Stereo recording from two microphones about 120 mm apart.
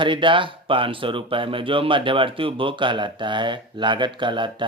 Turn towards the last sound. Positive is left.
turn(degrees=-40)  # may be behind; listen again after turning